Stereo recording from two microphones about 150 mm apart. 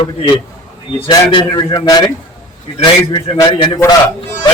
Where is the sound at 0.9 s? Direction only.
35° left (ahead or behind).